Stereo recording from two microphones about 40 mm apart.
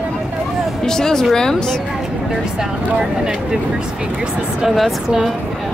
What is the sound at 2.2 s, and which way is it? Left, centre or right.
Speech, centre.